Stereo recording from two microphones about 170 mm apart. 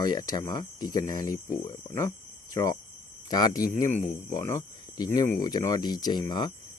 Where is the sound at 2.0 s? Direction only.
20° left (ahead or behind).